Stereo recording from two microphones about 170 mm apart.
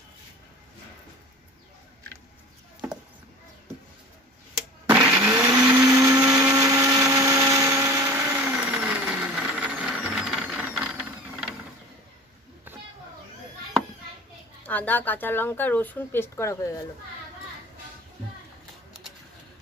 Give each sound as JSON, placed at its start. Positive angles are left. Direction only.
{"t": 4.8, "sound": "blender", "side_deg": -10}
{"t": 6.1, "sound": "blender", "side_deg": -5}
{"t": 6.5, "sound": "blender", "side_deg": -20}
{"t": 8.7, "sound": "squeal", "side_deg": -10}
{"t": 12.7, "sound": "a sound", "side_deg": -10}
{"t": 14.7, "sound": "speech", "side_deg": 10}